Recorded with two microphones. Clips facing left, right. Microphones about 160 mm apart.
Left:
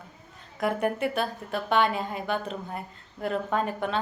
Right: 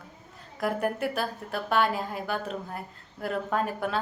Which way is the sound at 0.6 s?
Centre (ahead or behind).